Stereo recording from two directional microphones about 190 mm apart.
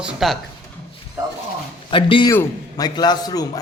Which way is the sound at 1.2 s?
15° right (ahead or behind).